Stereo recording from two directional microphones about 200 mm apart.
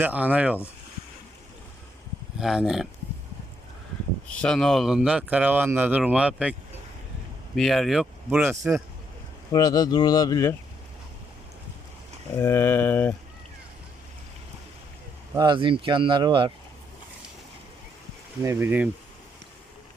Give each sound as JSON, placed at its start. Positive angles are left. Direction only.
{"t": 0.0, "sound": "speech", "side_deg": -5}
{"t": 2.4, "sound": "speech", "side_deg": 0}
{"t": 4.3, "sound": "speech", "side_deg": 5}
{"t": 9.5, "sound": "speech", "side_deg": 20}
{"t": 12.4, "sound": "speech", "side_deg": 10}
{"t": 15.4, "sound": "speech", "side_deg": -25}
{"t": 18.4, "sound": "speech", "side_deg": -10}